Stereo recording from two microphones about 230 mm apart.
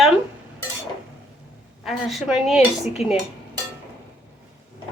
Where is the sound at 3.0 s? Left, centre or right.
Left.